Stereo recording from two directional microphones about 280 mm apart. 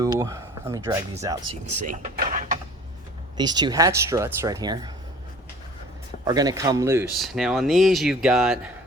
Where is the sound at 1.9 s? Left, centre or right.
Right.